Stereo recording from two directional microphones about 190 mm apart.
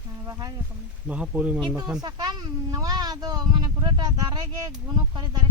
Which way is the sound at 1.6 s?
25° right (ahead or behind).